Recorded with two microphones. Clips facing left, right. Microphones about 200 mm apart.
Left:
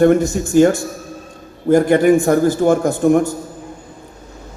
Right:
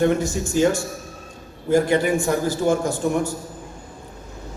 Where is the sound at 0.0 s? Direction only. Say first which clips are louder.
Left 7 dB; 55° left (ahead or behind).